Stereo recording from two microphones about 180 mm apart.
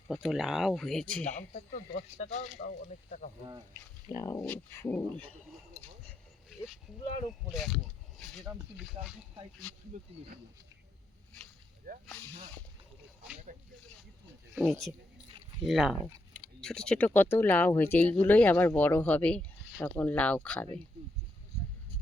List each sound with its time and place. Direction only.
0.1 s speech: centre (ahead or behind)
1.2 s speech: 40° left (ahead or behind)
3.8 s speech: 15° left (ahead or behind)
5.7 s speech: 40° left (ahead or behind)
6.5 s a sound: centre (ahead or behind)
7.3 s speech: centre (ahead or behind)
9.9 s speech: 45° right (ahead or behind)
12.0 s speech: 10° left (ahead or behind)
14.6 s speech: centre (ahead or behind)